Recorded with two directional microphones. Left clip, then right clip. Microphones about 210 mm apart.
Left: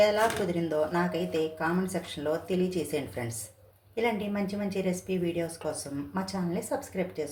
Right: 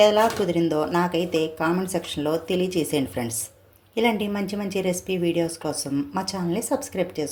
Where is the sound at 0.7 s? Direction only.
35° right (ahead or behind).